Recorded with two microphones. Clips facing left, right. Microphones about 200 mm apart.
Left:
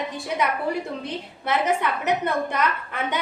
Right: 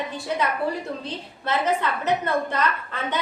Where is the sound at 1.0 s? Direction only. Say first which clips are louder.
Left 1 dB; 15° left (ahead or behind).